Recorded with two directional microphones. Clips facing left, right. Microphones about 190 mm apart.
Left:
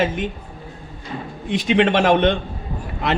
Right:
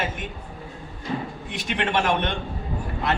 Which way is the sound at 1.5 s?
90° left.